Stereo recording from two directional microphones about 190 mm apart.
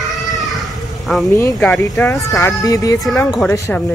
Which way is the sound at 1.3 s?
10° left (ahead or behind).